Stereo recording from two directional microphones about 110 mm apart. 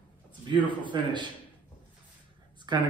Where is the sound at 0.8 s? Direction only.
45° right (ahead or behind).